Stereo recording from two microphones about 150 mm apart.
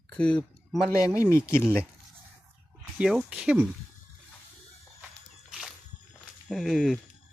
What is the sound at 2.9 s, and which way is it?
Speech, 5° right (ahead or behind).